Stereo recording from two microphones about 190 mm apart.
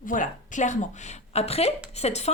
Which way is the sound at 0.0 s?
45° left (ahead or behind).